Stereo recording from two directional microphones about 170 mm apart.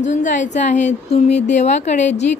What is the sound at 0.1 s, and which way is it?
Speech, 45° left (ahead or behind).